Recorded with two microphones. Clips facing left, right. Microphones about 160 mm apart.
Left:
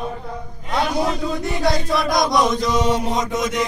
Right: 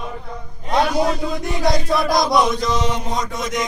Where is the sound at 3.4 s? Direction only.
5° left (ahead or behind).